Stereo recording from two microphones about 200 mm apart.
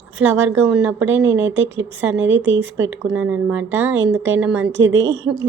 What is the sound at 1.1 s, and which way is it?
Speech, 75° right (ahead or behind).